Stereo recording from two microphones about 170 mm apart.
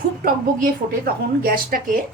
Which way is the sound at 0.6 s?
60° right (ahead or behind).